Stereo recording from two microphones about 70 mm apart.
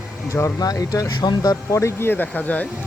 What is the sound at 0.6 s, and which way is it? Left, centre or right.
Speech, left.